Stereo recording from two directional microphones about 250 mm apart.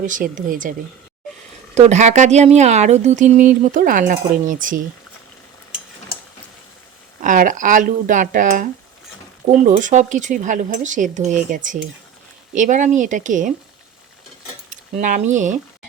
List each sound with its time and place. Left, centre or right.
0.0 s speech: right
1.7 s speech: right
7.2 s speech: right
14.7 s speech: right